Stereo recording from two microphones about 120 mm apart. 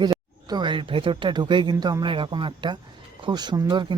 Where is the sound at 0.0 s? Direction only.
35° right (ahead or behind).